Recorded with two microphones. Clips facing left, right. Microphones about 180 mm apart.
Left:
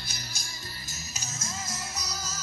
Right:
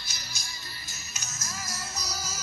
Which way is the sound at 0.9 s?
35° left (ahead or behind).